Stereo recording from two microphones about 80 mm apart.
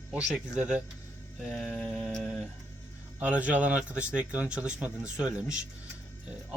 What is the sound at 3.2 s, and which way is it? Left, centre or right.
Speech, centre.